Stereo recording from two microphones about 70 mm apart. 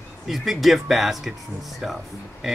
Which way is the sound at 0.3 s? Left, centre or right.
Centre.